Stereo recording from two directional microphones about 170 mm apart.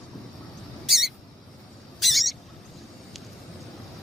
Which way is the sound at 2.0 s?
Centre (ahead or behind).